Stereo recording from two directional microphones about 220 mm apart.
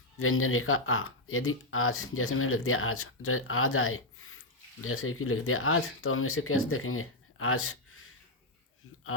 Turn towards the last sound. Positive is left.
turn(degrees=75)  # may be behind; listen again after turning